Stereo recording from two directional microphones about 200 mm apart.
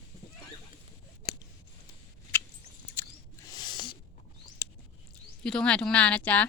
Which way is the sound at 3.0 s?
10° left (ahead or behind).